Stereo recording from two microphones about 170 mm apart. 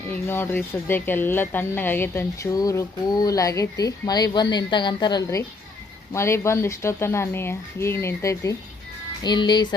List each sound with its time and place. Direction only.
0.1 s speech: 10° left (ahead or behind)